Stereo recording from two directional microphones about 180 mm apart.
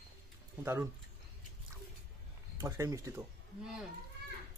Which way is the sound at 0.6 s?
15° right (ahead or behind).